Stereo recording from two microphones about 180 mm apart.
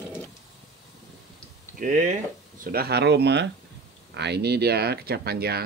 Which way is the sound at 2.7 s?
65° right (ahead or behind).